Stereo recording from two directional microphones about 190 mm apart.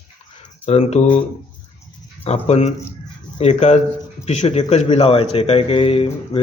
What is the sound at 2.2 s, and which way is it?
Speech, 35° left (ahead or behind).